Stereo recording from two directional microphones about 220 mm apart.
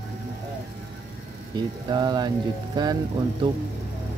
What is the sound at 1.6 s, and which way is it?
Speech, 20° right (ahead or behind).